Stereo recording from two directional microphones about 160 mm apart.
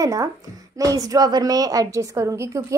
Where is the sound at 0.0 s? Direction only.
20° right (ahead or behind).